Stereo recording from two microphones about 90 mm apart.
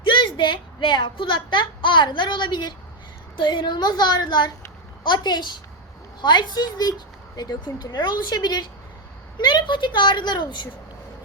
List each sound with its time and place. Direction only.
0.0 s a woman's voice: 65° left (ahead or behind)